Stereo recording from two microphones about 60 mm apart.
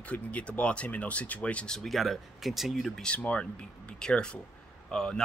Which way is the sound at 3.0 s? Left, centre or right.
Centre.